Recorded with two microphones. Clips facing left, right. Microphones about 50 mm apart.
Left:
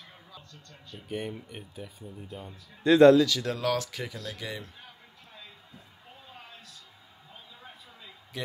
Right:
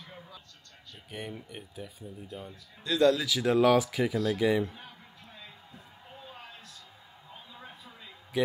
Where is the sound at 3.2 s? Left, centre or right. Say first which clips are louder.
Right 1 dB; centre.